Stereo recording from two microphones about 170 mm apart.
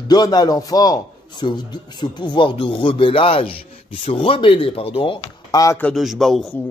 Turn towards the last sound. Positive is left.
turn(degrees=5)  # may be behind; listen again after turning